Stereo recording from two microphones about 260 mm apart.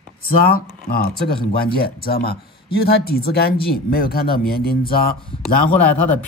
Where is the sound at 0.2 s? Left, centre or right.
Left.